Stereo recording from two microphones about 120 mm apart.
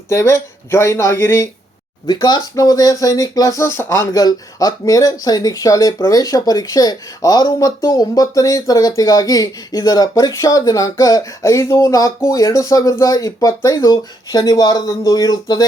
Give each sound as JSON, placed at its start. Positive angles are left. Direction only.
{"t": 0.1, "sound": "speech", "side_deg": 25}
{"t": 2.0, "sound": "speech", "side_deg": 35}
{"t": 4.1, "sound": "speech", "side_deg": 30}